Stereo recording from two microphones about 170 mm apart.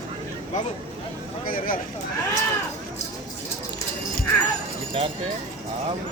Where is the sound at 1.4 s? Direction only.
55° left (ahead or behind).